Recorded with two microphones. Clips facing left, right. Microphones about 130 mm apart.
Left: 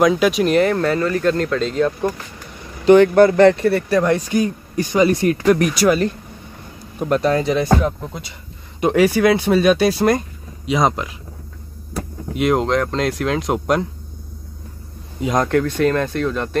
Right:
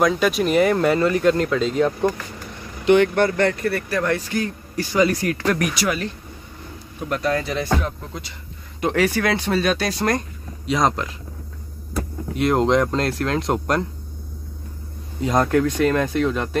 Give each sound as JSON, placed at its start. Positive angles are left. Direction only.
{"t": 0.0, "sound": "speech", "side_deg": 5}
{"t": 2.8, "sound": "speech", "side_deg": 35}
{"t": 5.8, "sound": "speech", "side_deg": 35}
{"t": 12.4, "sound": "speech", "side_deg": 5}
{"t": 15.2, "sound": "speech", "side_deg": -5}